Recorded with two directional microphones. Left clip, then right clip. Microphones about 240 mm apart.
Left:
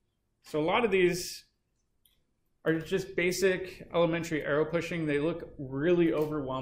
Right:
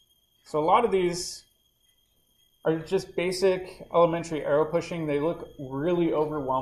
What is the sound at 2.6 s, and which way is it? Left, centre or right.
Speech, centre.